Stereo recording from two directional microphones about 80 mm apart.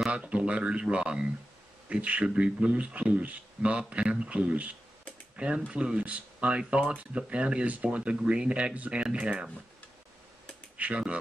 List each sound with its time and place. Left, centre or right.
0.1 s speech: centre
5.3 s typing: centre
5.7 s speech: centre
10.8 s speech: centre